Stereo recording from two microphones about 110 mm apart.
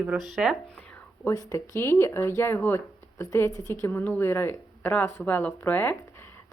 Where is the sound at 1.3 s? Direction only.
30° left (ahead or behind).